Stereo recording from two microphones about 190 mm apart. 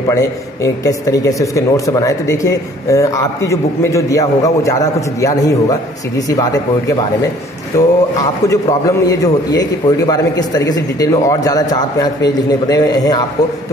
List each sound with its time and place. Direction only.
0.1 s a man's voice: 15° left (ahead or behind)